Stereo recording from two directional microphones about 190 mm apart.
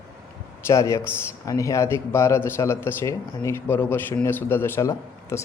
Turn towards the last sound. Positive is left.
turn(degrees=15)  # may be behind; listen again after turning